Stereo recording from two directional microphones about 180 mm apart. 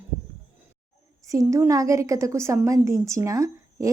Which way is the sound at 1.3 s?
20° right (ahead or behind).